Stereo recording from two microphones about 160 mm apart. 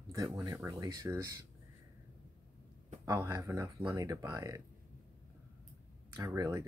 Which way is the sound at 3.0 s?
20° right (ahead or behind).